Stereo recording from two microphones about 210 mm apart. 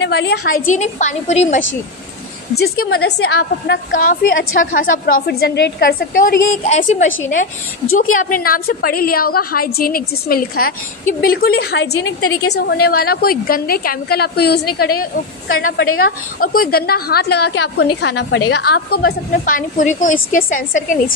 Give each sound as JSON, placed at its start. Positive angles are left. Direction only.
{"t": 0.0, "sound": "a woman's voice", "side_deg": 55}
{"t": 0.7, "sound": "a woman's voice", "side_deg": 35}
{"t": 2.9, "sound": "a woman's voice", "side_deg": 50}
{"t": 8.2, "sound": "a woman's voice", "side_deg": 40}